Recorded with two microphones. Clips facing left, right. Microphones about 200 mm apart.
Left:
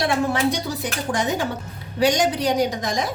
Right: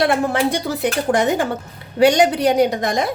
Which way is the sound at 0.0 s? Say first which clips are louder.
Right 3 dB; 55° right (ahead or behind).